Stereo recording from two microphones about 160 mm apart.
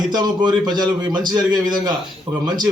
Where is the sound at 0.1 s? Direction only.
25° right (ahead or behind).